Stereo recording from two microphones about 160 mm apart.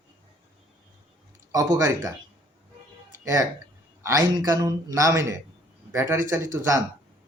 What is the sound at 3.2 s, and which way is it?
A man's voice, 20° right (ahead or behind).